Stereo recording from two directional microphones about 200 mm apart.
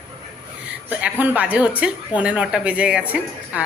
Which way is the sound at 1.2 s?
10° right (ahead or behind).